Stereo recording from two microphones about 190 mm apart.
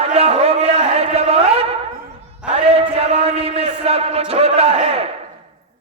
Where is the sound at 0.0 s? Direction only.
30° right (ahead or behind).